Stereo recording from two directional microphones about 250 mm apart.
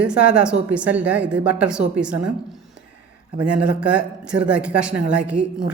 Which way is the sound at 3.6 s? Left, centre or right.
Centre.